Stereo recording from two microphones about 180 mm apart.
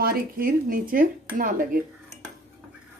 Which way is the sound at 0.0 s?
55° right (ahead or behind).